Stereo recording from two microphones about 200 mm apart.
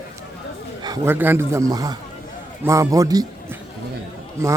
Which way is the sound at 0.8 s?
20° right (ahead or behind).